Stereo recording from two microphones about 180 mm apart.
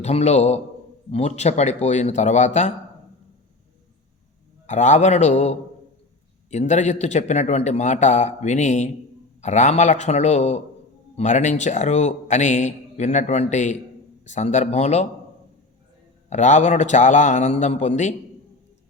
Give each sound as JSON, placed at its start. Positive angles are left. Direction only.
{"t": 0.0, "sound": "a man's voice", "side_deg": 35}
{"t": 4.6, "sound": "a man's voice", "side_deg": 40}
{"t": 16.3, "sound": "a man's voice", "side_deg": 40}